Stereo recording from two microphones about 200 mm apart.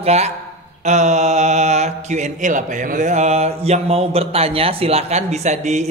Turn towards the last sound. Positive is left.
turn(degrees=-35)  # may be behind; listen again after turning